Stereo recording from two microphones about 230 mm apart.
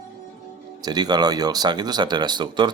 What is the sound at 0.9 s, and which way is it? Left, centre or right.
Speech, centre.